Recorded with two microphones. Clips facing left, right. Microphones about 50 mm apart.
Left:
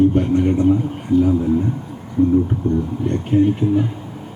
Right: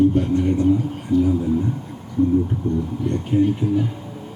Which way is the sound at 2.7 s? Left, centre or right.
Left.